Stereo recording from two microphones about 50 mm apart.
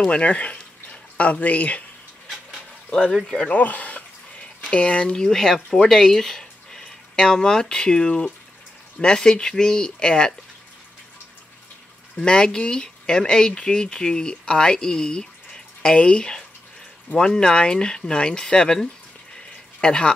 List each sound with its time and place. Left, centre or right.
0.0 s speech: left
3.1 s speech: centre
3.4 s speech: left; by 10.3 s centre
12.2 s speech: centre